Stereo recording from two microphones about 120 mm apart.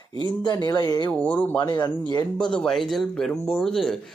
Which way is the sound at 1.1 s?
15° left (ahead or behind).